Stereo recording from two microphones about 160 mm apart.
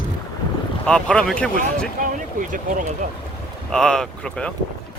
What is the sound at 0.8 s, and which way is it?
Speech, 5° left (ahead or behind).